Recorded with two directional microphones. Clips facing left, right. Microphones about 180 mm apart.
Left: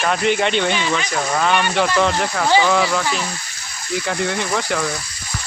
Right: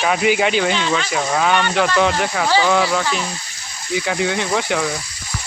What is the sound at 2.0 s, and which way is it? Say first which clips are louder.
Speech: right 1 dB; centre (ahead or behind).